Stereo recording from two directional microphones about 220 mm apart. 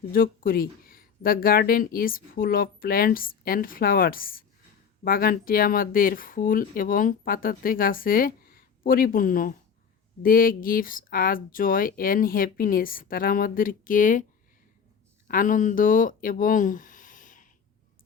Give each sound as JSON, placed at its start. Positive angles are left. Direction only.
{"t": 0.1, "sound": "speech", "side_deg": 40}
{"t": 15.3, "sound": "speech", "side_deg": 35}